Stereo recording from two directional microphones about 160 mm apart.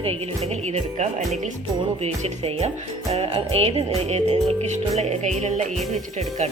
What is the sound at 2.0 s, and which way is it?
Music, 40° right (ahead or behind).